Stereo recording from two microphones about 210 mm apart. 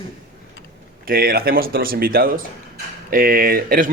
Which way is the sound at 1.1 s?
45° right (ahead or behind).